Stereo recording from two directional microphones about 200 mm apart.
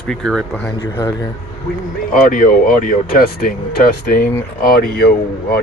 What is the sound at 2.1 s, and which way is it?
Speech, 45° left (ahead or behind).